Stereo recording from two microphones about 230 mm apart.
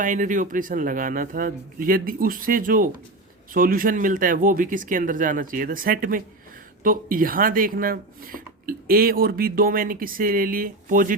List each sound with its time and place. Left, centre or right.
0.0 s speech: right